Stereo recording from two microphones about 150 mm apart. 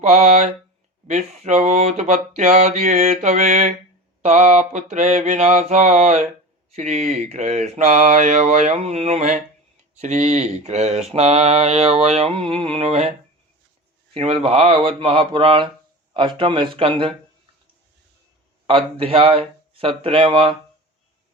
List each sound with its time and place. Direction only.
0.0 s mantra: 55° right (ahead or behind)
14.1 s speech: 35° right (ahead or behind)
18.7 s speech: 40° right (ahead or behind)